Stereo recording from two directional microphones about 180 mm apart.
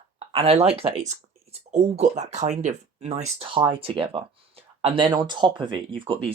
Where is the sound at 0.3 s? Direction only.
30° right (ahead or behind).